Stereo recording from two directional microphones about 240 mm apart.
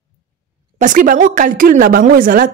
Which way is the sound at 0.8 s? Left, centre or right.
Right.